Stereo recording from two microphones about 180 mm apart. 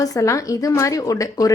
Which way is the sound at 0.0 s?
15° left (ahead or behind).